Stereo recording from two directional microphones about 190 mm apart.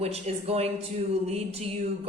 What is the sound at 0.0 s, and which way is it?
A man's voice, 35° right (ahead or behind).